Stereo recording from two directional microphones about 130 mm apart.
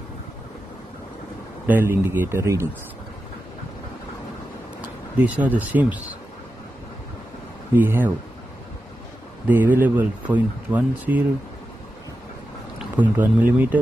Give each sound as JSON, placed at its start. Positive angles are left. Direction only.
{"t": 1.7, "sound": "speech", "side_deg": -15}
{"t": 5.1, "sound": "speech", "side_deg": -10}
{"t": 7.7, "sound": "speech", "side_deg": -15}
{"t": 9.5, "sound": "speech", "side_deg": -15}
{"t": 12.9, "sound": "speech", "side_deg": -15}